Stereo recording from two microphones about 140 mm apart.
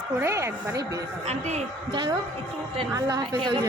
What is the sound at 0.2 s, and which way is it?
Speech, 20° right (ahead or behind).